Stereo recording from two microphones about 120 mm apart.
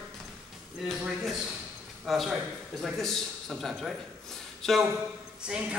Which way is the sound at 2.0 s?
Centre (ahead or behind).